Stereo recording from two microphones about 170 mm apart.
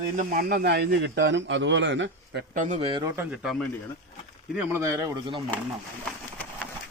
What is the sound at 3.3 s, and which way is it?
Speech, centre (ahead or behind).